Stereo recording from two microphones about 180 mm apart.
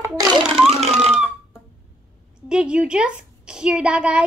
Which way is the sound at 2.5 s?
5° right (ahead or behind).